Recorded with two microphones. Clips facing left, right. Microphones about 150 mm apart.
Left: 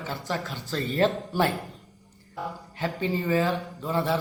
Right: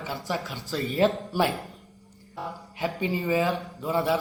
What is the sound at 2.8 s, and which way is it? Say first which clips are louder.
A man's voice: even; 15° right (ahead or behind).